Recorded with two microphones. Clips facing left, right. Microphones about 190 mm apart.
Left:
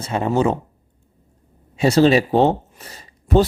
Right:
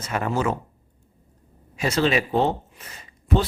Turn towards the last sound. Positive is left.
turn(degrees=40)  # may be behind; listen again after turning